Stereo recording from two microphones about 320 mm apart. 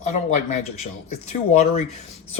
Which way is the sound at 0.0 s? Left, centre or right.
Left.